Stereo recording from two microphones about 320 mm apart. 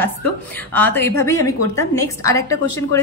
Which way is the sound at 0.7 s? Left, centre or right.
Centre.